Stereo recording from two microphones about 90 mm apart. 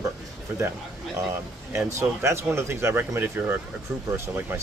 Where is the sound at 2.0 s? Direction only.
30° right (ahead or behind).